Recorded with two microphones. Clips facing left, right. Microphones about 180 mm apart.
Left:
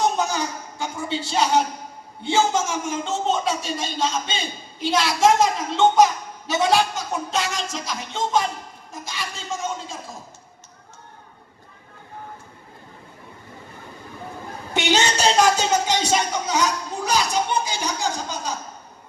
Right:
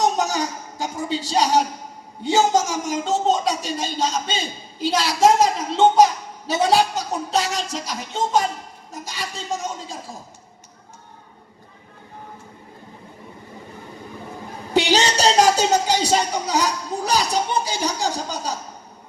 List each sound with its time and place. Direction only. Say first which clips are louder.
0.0 s a sound: right 1 dB; 40° right (ahead or behind)
2.2 s speech: right 3 dB; 40° right (ahead or behind)
14.7 s a woman's voice: right 3 dB; 35° right (ahead or behind)